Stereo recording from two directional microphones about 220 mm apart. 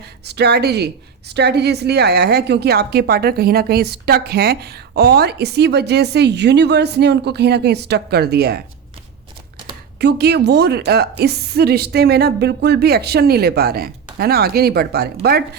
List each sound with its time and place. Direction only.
0.3 s a woman's voice: 50° right (ahead or behind)
10.0 s a woman's voice: 50° right (ahead or behind)